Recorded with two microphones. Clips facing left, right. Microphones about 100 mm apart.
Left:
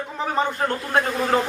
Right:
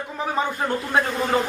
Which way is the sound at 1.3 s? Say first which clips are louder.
Left 1 dB; centre (ahead or behind).